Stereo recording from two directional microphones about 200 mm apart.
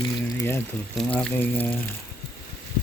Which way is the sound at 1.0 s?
5° left (ahead or behind).